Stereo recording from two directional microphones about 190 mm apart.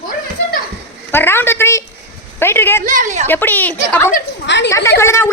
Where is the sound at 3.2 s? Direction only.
10° left (ahead or behind).